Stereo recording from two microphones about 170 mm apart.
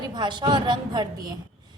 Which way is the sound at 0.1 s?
25° right (ahead or behind).